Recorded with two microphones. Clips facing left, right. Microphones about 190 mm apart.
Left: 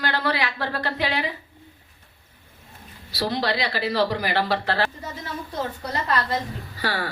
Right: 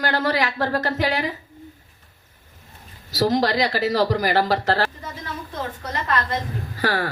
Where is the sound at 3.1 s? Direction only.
40° right (ahead or behind).